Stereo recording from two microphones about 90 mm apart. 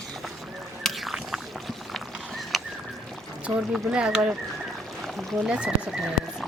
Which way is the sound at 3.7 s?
10° right (ahead or behind).